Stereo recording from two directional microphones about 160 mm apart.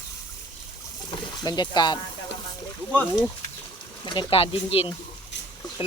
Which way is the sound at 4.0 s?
30° left (ahead or behind).